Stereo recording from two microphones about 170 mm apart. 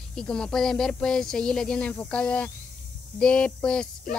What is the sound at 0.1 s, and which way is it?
Speech, 5° left (ahead or behind).